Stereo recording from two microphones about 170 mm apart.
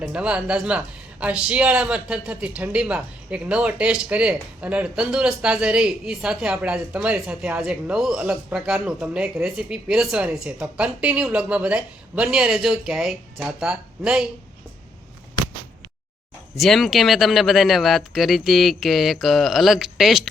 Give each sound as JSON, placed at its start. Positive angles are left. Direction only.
{"t": 0.0, "sound": "a man's voice", "side_deg": -5}
{"t": 16.6, "sound": "a man's voice", "side_deg": 0}